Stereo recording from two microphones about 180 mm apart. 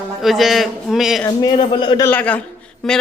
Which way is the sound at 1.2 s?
20° left (ahead or behind).